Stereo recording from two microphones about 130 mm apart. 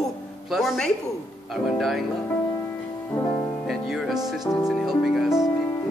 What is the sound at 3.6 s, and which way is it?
Speech, centre (ahead or behind).